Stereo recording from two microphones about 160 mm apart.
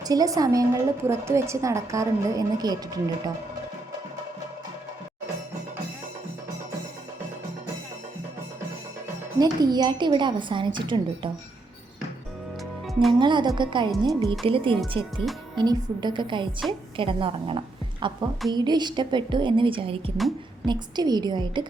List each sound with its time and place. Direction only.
0.0 s a woman's voice: 25° right (ahead or behind)
9.4 s a woman's voice: 25° right (ahead or behind)
12.8 s music: centre (ahead or behind)
13.1 s a woman's voice: 30° right (ahead or behind)